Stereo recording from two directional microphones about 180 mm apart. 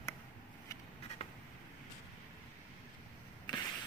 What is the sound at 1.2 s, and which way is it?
Vehicle, 35° left (ahead or behind).